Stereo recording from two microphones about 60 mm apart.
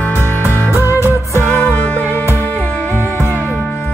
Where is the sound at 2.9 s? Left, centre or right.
Right.